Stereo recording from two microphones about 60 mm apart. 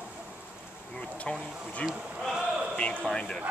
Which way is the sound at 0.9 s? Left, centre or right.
Centre.